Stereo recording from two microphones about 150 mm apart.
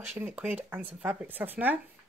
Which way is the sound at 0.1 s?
15° right (ahead or behind).